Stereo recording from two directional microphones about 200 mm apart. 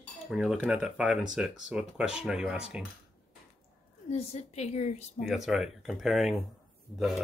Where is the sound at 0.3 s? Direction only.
5° right (ahead or behind).